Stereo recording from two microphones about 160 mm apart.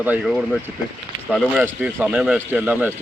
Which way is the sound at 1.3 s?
5° right (ahead or behind).